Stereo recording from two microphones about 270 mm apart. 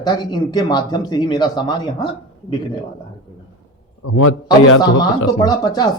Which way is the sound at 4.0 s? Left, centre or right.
Left.